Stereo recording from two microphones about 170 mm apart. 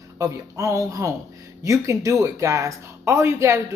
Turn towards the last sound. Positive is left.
turn(degrees=-15)  # may be behind; listen again after turning